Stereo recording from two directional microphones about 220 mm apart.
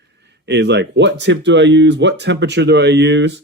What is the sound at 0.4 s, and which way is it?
Speech, 50° right (ahead or behind).